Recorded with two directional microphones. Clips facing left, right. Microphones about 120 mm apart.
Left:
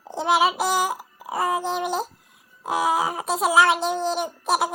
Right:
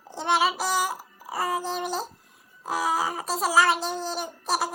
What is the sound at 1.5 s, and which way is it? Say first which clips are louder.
Child singing: left 4 dB; 5° left (ahead or behind).